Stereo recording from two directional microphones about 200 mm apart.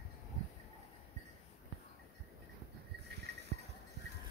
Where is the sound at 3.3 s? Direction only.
55° right (ahead or behind).